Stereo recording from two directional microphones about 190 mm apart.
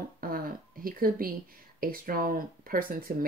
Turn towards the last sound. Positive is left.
turn(degrees=-50)  # may be behind; listen again after turning